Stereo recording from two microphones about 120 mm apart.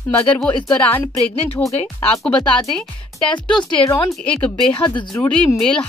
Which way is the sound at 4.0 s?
10° left (ahead or behind).